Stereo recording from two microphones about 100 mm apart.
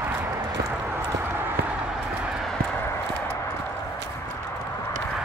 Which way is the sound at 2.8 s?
25° left (ahead or behind).